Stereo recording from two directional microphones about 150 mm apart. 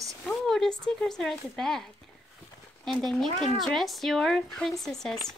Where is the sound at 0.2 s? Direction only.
Centre (ahead or behind).